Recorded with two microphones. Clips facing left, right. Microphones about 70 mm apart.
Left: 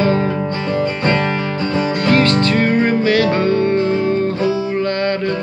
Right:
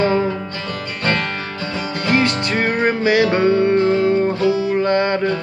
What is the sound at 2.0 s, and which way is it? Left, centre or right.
Music, centre.